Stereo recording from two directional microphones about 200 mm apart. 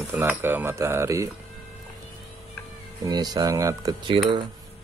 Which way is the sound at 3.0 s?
20° right (ahead or behind).